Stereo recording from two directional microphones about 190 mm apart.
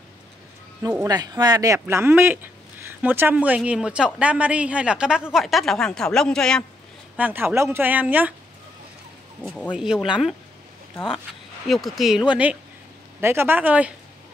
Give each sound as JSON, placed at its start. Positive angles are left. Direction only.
{"t": 0.8, "sound": "a woman's voice", "side_deg": -15}
{"t": 7.2, "sound": "a woman's voice", "side_deg": -10}
{"t": 9.5, "sound": "speech", "side_deg": 0}
{"t": 11.6, "sound": "a woman's voice", "side_deg": 0}